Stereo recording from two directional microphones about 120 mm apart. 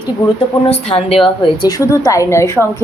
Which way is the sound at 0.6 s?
55° left (ahead or behind).